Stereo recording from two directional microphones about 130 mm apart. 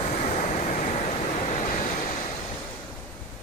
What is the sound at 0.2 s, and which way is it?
Waves, 60° left (ahead or behind).